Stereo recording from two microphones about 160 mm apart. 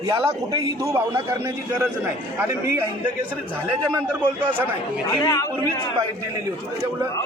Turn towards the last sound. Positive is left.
turn(degrees=25)  # may be behind; listen again after turning